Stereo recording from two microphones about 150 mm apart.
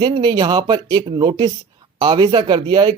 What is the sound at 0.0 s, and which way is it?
Speech, 30° right (ahead or behind).